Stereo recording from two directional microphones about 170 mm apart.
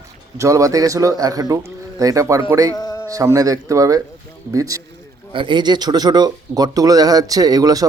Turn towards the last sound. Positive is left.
turn(degrees=-20)  # may be behind; listen again after turning